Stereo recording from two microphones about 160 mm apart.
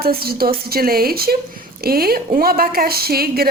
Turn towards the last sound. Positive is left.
turn(degrees=-70)  # may be behind; listen again after turning